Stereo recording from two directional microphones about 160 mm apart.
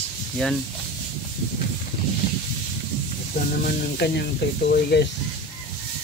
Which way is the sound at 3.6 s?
80° left.